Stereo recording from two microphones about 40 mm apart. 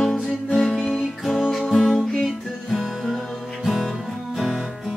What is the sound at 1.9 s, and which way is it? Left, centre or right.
Music, centre.